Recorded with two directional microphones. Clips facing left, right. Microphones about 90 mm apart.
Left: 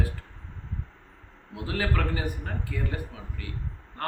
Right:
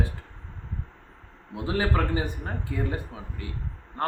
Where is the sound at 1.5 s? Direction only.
25° right (ahead or behind).